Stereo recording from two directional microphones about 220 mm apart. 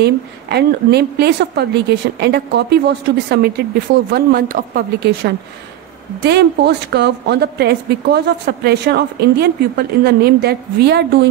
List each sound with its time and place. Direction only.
0.0 s a woman's voice: 50° right (ahead or behind)